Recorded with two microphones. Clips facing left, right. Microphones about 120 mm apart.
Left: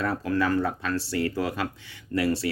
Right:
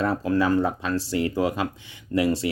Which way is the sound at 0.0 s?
25° right (ahead or behind).